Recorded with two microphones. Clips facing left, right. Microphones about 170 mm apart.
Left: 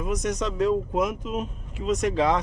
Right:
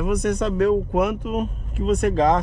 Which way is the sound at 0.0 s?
60° right (ahead or behind).